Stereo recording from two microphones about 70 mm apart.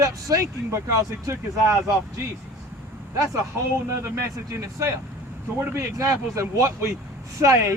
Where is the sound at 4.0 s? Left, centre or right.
Right.